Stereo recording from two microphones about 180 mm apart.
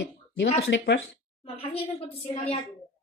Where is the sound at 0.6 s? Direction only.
85° left.